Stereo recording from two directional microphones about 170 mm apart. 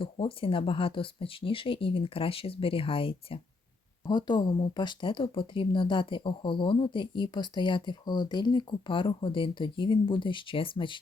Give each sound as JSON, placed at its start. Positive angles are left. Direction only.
{"t": 0.0, "sound": "speech", "side_deg": 30}